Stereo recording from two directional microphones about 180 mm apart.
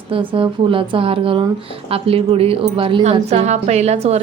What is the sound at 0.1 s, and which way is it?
A woman's voice, 30° right (ahead or behind).